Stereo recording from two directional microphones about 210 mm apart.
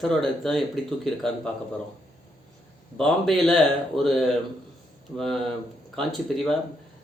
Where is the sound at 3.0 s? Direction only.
Centre (ahead or behind).